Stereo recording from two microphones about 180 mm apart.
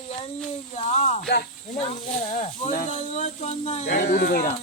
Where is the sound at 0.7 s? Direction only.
40° left (ahead or behind).